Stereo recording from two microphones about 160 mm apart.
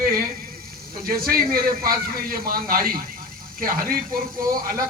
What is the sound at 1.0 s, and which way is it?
Speech, 65° right (ahead or behind).